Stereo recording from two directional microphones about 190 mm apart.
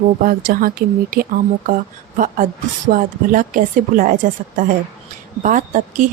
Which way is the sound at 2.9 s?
45° right (ahead or behind).